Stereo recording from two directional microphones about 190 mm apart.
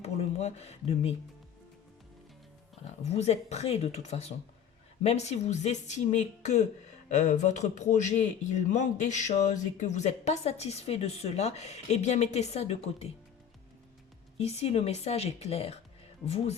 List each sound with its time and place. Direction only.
0.0 s speech: 35° left (ahead or behind)
3.0 s speech: 35° left (ahead or behind)
14.3 s speech: 35° left (ahead or behind)